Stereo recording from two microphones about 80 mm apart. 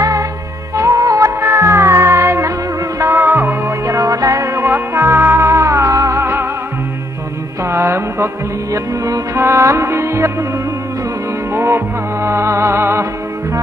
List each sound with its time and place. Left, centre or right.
0.7 s music: right
4.6 s music: right
7.6 s music: right
11.5 s music: right